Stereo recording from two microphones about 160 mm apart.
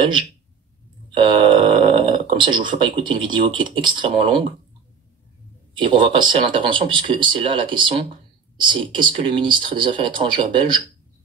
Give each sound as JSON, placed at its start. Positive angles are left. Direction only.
{"t": 1.1, "sound": "speech", "side_deg": -35}
{"t": 5.8, "sound": "speech", "side_deg": -30}